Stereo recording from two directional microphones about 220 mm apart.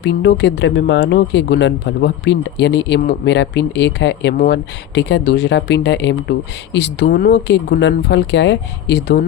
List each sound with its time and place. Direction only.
0.0 s speech: 50° left (ahead or behind)